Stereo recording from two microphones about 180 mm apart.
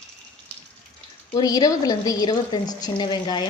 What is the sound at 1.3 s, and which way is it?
A woman's voice, 20° left (ahead or behind).